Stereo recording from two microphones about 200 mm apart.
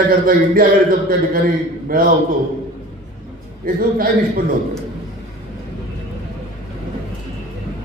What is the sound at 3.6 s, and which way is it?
Speech, 45° right (ahead or behind).